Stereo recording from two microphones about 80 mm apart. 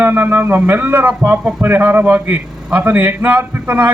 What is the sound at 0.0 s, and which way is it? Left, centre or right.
A man's voice, right.